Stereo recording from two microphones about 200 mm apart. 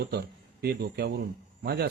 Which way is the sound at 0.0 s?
55° right (ahead or behind).